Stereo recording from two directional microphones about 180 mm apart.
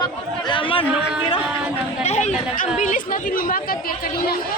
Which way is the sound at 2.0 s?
40° left (ahead or behind).